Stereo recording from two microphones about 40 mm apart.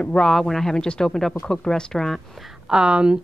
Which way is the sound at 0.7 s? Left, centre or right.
Left.